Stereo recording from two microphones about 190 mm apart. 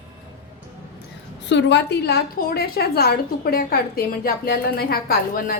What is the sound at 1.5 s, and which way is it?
A woman's voice, 70° left (ahead or behind).